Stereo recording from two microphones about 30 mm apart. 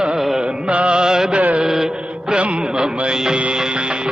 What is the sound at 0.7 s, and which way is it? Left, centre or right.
Music, right.